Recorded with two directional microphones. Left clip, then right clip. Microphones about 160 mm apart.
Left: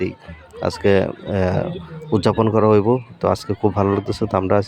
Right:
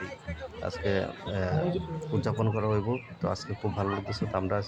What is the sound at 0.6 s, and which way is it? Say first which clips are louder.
Speech: left 13 dB; 55° left (ahead or behind).